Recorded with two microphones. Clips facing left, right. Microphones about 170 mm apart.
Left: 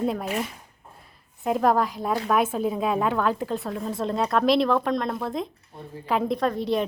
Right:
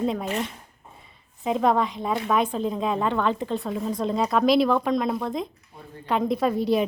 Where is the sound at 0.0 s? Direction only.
Centre (ahead or behind).